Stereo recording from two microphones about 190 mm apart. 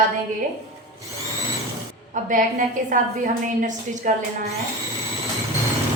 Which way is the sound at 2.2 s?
45° right (ahead or behind).